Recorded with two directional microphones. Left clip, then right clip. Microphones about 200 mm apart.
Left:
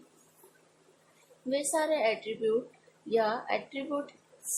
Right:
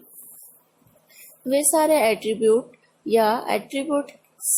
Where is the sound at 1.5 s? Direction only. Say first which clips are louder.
Right 10 dB; 45° right (ahead or behind).